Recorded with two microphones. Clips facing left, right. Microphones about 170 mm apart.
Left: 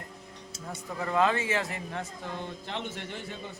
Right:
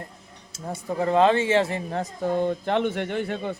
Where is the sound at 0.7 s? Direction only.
30° right (ahead or behind); by 3.5 s 60° right (ahead or behind).